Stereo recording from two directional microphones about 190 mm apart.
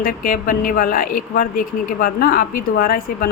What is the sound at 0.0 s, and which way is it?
Speech, 45° left (ahead or behind).